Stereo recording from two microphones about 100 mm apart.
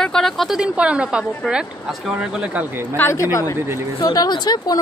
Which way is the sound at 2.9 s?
25° left (ahead or behind).